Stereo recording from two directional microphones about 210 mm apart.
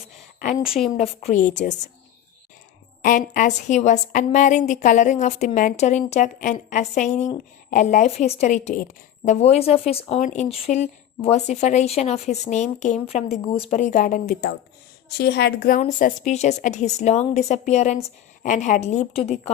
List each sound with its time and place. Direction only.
0.9 s a woman's voice: 30° left (ahead or behind)
3.0 s a woman's voice: 40° left (ahead or behind)